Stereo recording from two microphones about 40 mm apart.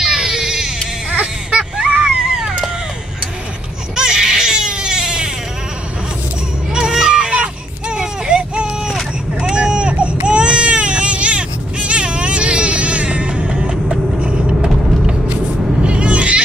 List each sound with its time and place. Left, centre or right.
0.0 s baby cry: centre
3.9 s baby cry: centre
6.7 s music: centre
7.9 s a sound: right
9.4 s vehicle: right
10.2 s baby cry: right
13.5 s vehicle: right
15.8 s goat: right